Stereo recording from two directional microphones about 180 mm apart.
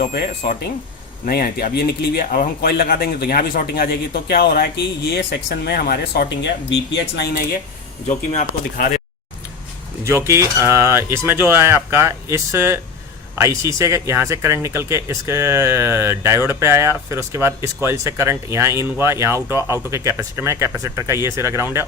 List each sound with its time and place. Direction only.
0.0 s speech: 55° left (ahead or behind); by 6.7 s 75° left (ahead or behind)
7.2 s speech: 60° left (ahead or behind)
8.0 s speech: 40° left (ahead or behind)
10.0 s speech: 15° right (ahead or behind)